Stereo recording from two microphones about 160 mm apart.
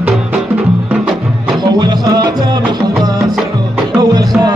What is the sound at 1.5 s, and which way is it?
Music, 25° right (ahead or behind).